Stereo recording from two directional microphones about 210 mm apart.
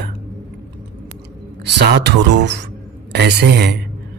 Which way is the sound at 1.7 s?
55° right (ahead or behind).